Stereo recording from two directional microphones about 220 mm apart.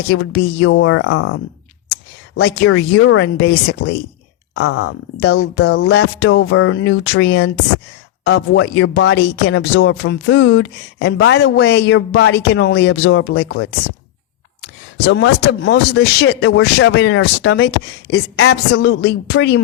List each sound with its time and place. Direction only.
0.1 s a woman's voice: 50° left (ahead or behind); by 1.4 s 70° left (ahead or behind)
1.9 s a sound: 50° left (ahead or behind)
2.6 s speech: 60° left (ahead or behind)
4.5 s speech: 75° left (ahead or behind); by 13.7 s 50° left (ahead or behind)
15.0 s speech: 50° left (ahead or behind)